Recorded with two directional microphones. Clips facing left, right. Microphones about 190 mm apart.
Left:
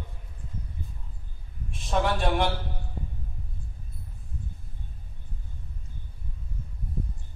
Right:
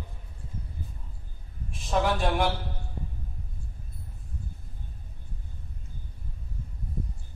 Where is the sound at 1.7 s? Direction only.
Centre (ahead or behind).